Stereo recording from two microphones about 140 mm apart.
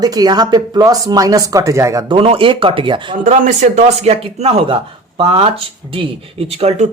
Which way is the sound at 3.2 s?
60° right (ahead or behind).